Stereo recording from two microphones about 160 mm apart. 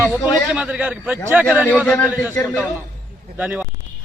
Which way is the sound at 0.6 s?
10° right (ahead or behind).